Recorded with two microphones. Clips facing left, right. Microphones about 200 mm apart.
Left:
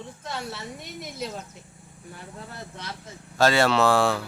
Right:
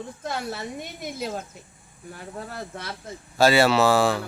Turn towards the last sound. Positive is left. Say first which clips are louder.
# right 1 dB
turn(degrees=0)  # may be behind; listen again after turning